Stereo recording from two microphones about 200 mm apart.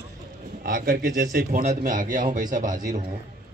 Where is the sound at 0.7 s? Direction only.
50° right (ahead or behind).